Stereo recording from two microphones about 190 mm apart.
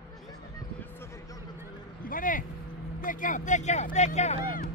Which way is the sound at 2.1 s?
45° left (ahead or behind).